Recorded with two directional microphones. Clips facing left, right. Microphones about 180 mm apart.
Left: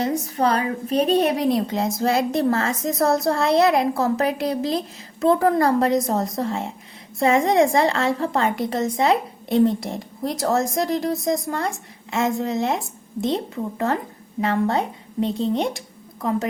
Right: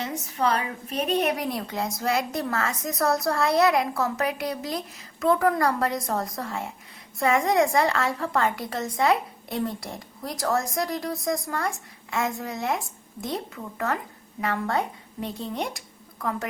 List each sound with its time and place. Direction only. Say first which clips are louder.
0.0 s a woman's voice: left 6 dB; 35° left (ahead or behind)